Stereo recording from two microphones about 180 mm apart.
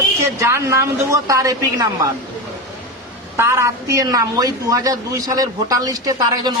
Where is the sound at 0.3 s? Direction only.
15° right (ahead or behind).